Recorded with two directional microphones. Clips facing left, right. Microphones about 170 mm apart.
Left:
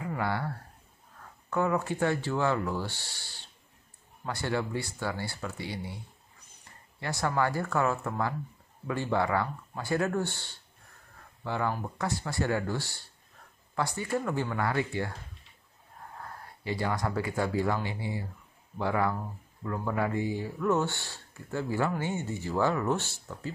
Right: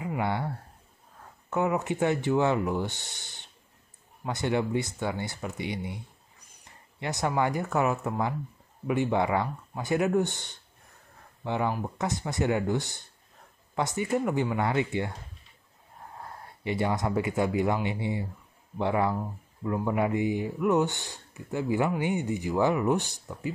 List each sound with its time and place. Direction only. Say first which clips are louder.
0.0 s speech: right 2 dB; 20° right (ahead or behind)
7.0 s speech: right 2 dB; 20° right (ahead or behind)
16.2 s speech: right 1 dB; 20° right (ahead or behind)